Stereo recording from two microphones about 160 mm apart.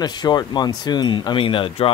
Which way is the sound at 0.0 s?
25° left (ahead or behind).